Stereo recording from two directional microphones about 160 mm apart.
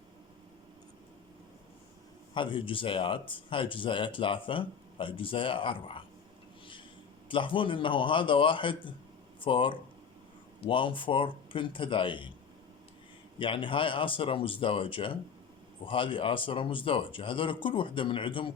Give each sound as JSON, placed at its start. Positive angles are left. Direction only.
{"t": 2.3, "sound": "speech", "side_deg": 30}
{"t": 7.3, "sound": "speech", "side_deg": 30}
{"t": 13.4, "sound": "speech", "side_deg": 30}